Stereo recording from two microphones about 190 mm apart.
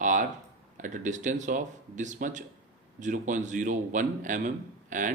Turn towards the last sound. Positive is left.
turn(degrees=-40)  # may be behind; listen again after turning